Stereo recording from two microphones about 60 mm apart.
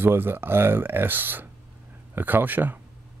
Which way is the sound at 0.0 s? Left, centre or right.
Right.